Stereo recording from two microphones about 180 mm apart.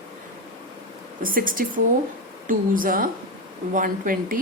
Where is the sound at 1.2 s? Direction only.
50° right (ahead or behind).